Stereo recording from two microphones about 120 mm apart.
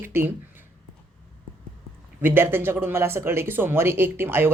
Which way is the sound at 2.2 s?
20° right (ahead or behind).